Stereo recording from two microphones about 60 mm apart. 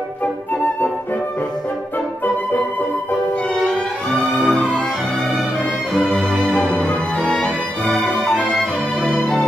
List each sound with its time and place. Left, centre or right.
3.5 s music: centre
4.4 s music: left
6.5 s music: centre
7.3 s music: centre